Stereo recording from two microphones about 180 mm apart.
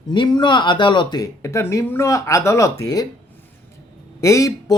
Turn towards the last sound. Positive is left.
turn(degrees=20)  # may be behind; listen again after turning